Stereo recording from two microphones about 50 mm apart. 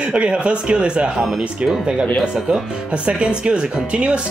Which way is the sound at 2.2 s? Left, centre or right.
Centre.